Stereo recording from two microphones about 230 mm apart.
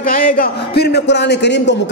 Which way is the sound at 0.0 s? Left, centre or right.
Left.